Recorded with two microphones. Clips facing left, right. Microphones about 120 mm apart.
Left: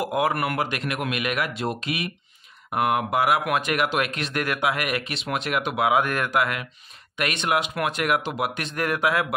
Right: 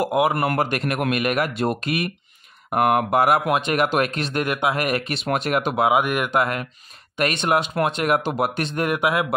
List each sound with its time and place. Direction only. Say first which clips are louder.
0.1 s speech: right 4 dB; 25° right (ahead or behind)
0.5 s speech: right 4 dB; 45° right (ahead or behind)
3.4 s speech: right 3 dB; 25° right (ahead or behind)
3.8 s speech: right 4 dB; 40° right (ahead or behind)
4.4 s speech: right 2 dB; 25° right (ahead or behind)
4.7 s speech: right 4 dB; 40° right (ahead or behind)
5.9 s speech: right 2 dB; 15° right (ahead or behind)
6.4 s speech: right 3 dB; 40° right (ahead or behind)
8.3 s speech: right 5 dB; 40° right (ahead or behind)
8.6 s speech: right 2 dB; 25° right (ahead or behind)